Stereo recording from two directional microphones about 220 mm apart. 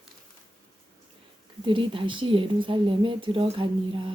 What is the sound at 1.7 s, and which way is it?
A woman's voice, 25° right (ahead or behind).